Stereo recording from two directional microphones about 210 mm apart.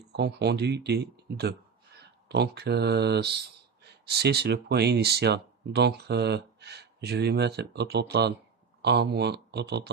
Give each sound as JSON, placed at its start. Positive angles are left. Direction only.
{"t": 0.1, "sound": "speech", "side_deg": -55}